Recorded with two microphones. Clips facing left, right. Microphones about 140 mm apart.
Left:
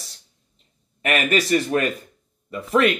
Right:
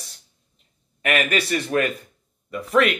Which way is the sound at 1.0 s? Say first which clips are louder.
Left 1 dB; 35° left (ahead or behind).